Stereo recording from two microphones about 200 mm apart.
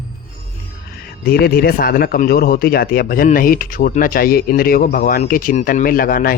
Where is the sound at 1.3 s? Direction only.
50° left (ahead or behind).